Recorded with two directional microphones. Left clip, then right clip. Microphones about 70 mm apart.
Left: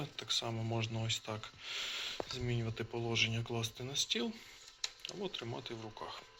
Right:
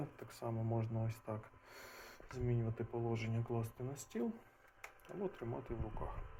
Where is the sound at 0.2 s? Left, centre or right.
Right.